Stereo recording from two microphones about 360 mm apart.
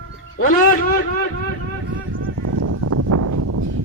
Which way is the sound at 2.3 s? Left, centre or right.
Right.